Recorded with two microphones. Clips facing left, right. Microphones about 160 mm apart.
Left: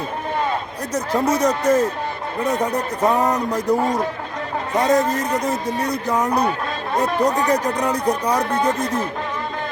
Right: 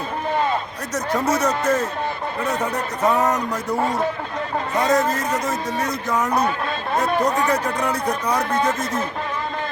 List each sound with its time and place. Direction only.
1.2 s speech: 15° left (ahead or behind)
4.9 s a man's voice: 35° left (ahead or behind)
7.5 s speech: 15° left (ahead or behind)